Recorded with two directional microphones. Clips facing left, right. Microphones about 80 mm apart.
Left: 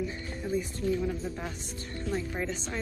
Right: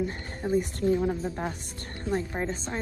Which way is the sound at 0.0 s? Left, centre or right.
Right.